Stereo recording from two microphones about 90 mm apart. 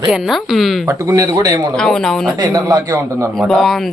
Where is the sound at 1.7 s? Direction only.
5° left (ahead or behind).